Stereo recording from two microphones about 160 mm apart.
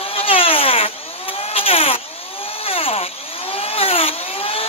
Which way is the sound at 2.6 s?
35° left (ahead or behind).